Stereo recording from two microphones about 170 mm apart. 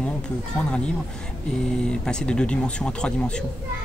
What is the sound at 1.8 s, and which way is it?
Speech, 5° left (ahead or behind).